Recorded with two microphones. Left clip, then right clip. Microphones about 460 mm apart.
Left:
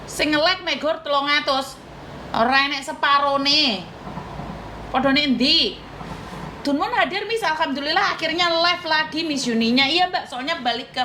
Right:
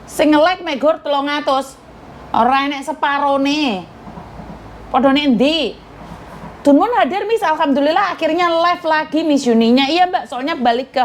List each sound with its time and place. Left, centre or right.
0.2 s a woman's voice: right
4.9 s a woman's voice: right
6.7 s a woman's voice: right